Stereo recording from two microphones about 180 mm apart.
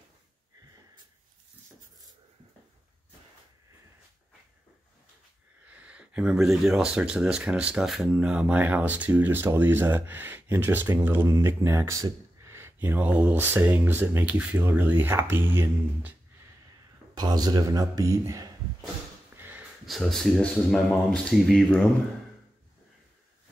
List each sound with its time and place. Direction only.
5.7 s speech: 5° right (ahead or behind)
17.1 s speech: 20° right (ahead or behind)
19.3 s sniff: 10° right (ahead or behind)
19.9 s speech: centre (ahead or behind)